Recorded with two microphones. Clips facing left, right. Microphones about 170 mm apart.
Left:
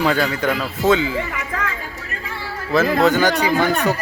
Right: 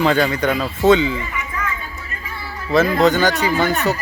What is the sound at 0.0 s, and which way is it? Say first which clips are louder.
Speech: right 2 dB; 5° left (ahead or behind).